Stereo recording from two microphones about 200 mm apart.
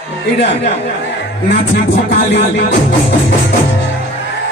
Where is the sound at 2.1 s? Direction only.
55° left (ahead or behind).